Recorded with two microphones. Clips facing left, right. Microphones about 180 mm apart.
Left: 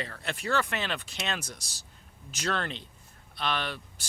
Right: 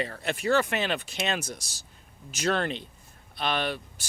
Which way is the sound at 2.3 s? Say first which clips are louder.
Right 5 dB; 15° right (ahead or behind).